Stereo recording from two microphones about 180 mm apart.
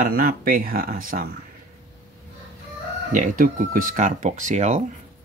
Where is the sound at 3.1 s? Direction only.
50° right (ahead or behind).